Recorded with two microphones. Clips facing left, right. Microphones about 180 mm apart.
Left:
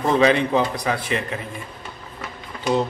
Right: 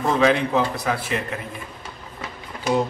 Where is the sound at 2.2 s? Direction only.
10° right (ahead or behind).